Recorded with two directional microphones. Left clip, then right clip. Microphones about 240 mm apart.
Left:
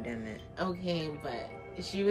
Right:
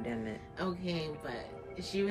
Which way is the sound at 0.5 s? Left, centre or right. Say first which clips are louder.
Left 4 dB; centre.